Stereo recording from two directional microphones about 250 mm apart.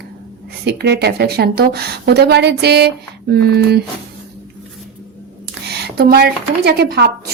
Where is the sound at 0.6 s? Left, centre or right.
Right.